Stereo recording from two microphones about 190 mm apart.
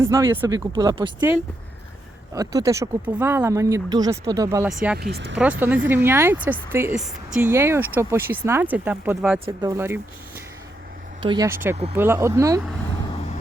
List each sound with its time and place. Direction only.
0.0 s speech: 15° right (ahead or behind)
2.3 s speech: 20° right (ahead or behind)
4.9 s speech: 60° right (ahead or behind)
5.4 s speech: 10° right (ahead or behind)
9.5 s speech: 20° right (ahead or behind)
11.2 s speech: 25° right (ahead or behind)
11.4 s speech: 10° right (ahead or behind)